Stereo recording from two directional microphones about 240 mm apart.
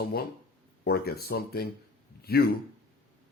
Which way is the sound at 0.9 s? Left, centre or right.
Left.